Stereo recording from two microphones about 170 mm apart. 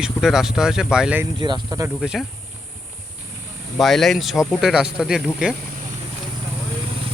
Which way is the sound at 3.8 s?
Centre (ahead or behind).